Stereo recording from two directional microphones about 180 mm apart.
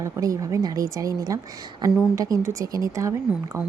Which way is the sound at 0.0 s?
20° right (ahead or behind).